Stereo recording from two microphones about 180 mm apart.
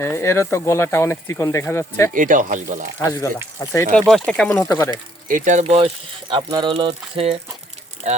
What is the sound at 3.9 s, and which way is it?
Speech, 5° left (ahead or behind).